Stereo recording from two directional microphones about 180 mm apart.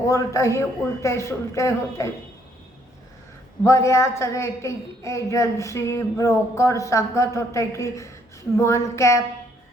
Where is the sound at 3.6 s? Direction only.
15° left (ahead or behind).